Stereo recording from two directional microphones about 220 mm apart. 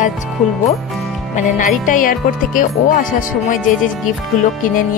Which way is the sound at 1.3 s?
35° left (ahead or behind).